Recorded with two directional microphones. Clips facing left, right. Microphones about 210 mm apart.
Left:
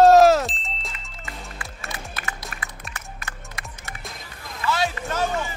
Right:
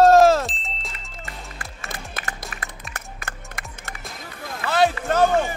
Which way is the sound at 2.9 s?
50° right (ahead or behind).